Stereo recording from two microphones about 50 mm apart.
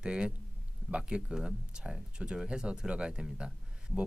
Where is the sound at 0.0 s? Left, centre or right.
Centre.